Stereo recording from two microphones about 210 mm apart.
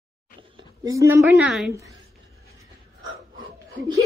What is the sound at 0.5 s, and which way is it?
A woman's voice, 15° right (ahead or behind).